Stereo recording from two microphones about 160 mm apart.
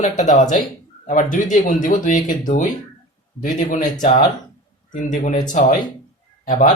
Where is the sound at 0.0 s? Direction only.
50° left (ahead or behind).